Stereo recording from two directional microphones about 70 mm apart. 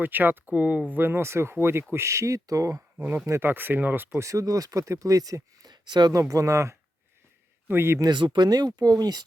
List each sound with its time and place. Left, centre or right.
0.0 s speech: right
3.4 s speech: right
4.2 s speech: right
6.1 s speech: right
7.7 s speech: right
8.0 s speech: right